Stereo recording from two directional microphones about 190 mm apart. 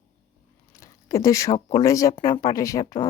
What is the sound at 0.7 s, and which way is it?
Speech, 15° left (ahead or behind).